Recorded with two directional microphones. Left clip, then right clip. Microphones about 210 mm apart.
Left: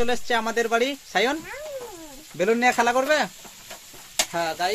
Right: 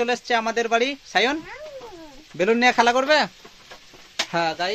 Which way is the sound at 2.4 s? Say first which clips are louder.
Right 2 dB; 20° right (ahead or behind).